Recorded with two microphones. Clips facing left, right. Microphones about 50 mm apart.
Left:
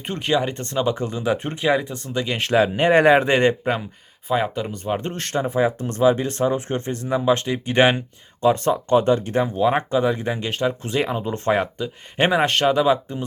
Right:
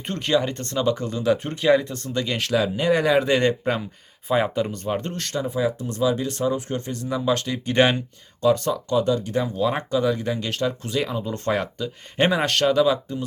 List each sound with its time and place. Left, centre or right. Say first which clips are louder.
0.0 s speech: left 1 dB; centre
1.6 s speech: right 2 dB; centre
2.4 s speech: left 6 dB; left
3.6 s speech: left 1 dB; centre
4.3 s speech: right 1 dB; centre
5.0 s speech: left 3 dB; left